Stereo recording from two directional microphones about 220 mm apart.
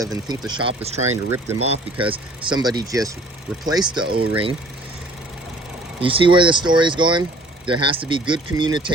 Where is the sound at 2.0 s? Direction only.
20° right (ahead or behind).